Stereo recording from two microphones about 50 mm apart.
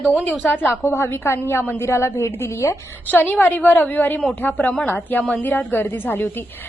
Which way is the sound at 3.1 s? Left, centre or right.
Left.